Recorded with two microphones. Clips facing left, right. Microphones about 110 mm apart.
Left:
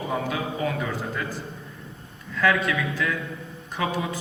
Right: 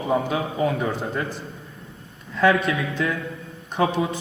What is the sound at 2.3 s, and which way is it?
Speech, 30° right (ahead or behind).